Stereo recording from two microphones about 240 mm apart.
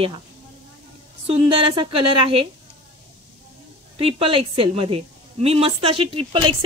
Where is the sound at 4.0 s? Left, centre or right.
Right.